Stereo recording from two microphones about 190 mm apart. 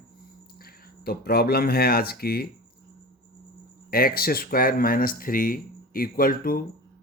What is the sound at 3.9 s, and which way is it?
Speech, 50° left (ahead or behind).